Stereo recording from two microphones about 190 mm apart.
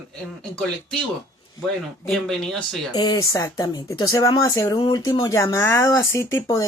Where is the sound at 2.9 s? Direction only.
20° left (ahead or behind).